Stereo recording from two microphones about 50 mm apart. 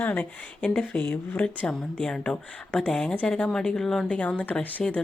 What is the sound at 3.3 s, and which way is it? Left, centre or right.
Speech, left.